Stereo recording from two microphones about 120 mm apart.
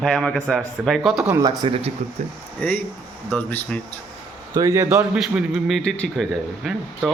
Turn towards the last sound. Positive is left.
turn(degrees=0)  # may be behind; listen again after turning